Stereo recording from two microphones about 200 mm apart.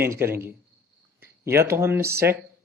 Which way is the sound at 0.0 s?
10° right (ahead or behind).